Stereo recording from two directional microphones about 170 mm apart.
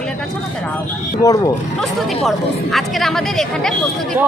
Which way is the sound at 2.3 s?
Centre (ahead or behind).